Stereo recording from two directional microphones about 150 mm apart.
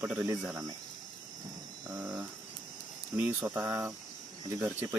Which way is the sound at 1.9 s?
25° right (ahead or behind).